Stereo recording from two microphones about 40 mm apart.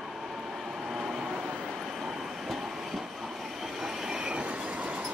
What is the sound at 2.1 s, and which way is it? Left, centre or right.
Train, centre.